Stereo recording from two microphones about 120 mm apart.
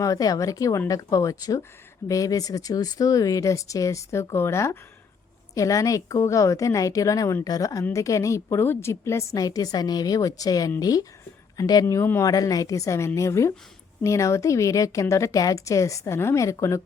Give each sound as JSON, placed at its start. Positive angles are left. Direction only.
{"t": 0.0, "sound": "a woman's voice", "side_deg": 30}